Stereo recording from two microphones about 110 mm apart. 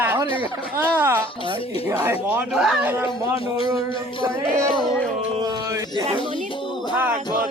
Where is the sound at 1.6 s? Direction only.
60° left (ahead or behind).